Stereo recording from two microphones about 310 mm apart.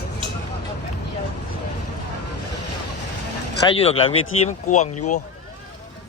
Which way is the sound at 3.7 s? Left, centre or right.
Centre.